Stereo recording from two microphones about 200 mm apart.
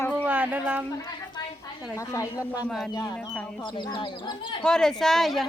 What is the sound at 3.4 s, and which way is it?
Speech, 5° left (ahead or behind).